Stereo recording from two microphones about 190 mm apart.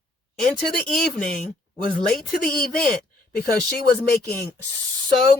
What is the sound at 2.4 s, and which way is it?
Speech, 50° left (ahead or behind).